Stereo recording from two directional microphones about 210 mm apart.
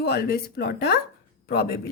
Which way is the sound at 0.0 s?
45° left (ahead or behind).